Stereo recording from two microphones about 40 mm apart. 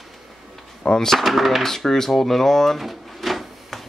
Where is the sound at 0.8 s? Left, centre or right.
Left.